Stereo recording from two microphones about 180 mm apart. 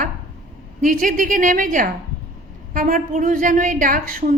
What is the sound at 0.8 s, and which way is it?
A woman's voice, 50° right (ahead or behind).